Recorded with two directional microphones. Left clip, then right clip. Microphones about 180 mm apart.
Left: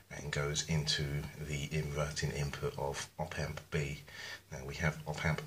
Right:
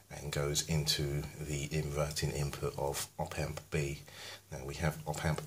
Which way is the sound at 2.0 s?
45° right (ahead or behind).